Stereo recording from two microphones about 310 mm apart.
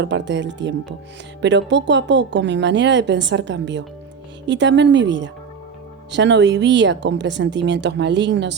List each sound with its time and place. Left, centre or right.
0.0 s speech: right